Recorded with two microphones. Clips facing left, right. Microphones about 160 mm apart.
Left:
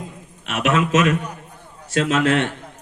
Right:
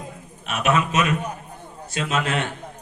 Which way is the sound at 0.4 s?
90° left.